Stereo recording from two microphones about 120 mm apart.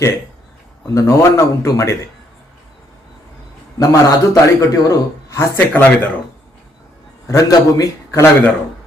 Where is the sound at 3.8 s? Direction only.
30° left (ahead or behind).